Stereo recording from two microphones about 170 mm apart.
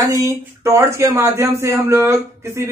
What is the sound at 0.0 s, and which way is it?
Speech, 20° right (ahead or behind).